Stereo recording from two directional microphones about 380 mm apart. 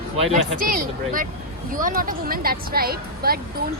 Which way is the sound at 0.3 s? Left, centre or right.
Centre.